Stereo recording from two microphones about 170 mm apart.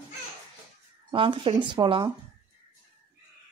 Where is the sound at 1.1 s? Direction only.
30° right (ahead or behind).